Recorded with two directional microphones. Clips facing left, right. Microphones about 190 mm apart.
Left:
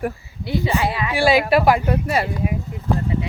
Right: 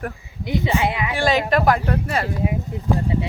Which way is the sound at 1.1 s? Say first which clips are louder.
Left 5 dB; 10° left (ahead or behind).